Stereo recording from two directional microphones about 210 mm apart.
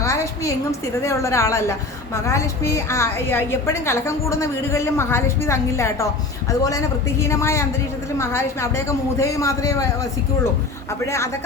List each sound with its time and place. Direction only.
0.0 s a sound: 15° left (ahead or behind)
1.0 s a woman's voice: 15° left (ahead or behind)
7.2 s a woman's voice: 15° left (ahead or behind)